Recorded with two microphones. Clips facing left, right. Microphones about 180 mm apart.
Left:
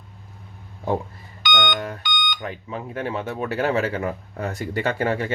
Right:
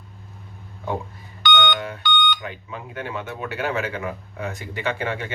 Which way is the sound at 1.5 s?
45° left (ahead or behind).